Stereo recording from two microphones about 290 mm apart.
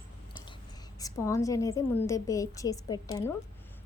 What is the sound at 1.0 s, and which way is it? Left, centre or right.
A woman's voice, centre.